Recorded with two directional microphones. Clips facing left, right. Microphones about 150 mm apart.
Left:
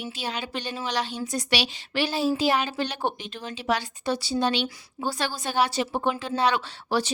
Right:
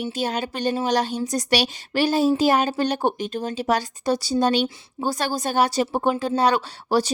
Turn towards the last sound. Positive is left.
turn(degrees=-40)  # may be behind; listen again after turning